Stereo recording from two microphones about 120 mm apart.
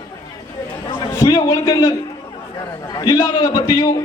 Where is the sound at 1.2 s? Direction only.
40° left (ahead or behind).